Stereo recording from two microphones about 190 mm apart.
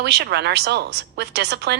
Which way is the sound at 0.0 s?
60° right (ahead or behind).